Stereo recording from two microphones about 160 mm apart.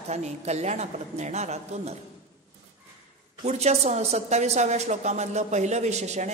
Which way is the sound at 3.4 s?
45° right (ahead or behind).